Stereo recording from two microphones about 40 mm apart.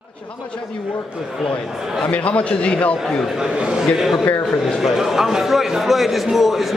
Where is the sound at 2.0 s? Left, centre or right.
Left.